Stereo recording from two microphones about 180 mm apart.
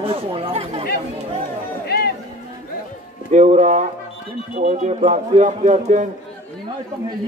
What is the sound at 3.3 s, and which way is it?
Music, 40° right (ahead or behind).